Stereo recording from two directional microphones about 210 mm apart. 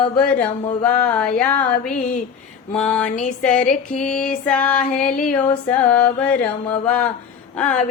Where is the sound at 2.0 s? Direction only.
40° left (ahead or behind).